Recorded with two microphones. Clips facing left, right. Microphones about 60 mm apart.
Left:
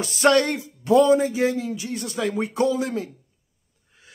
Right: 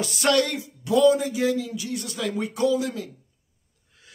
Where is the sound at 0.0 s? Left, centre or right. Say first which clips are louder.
Left 3 dB; left.